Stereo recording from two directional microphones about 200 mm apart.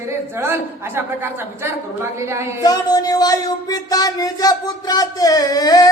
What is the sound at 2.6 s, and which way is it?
Speech, 20° left (ahead or behind).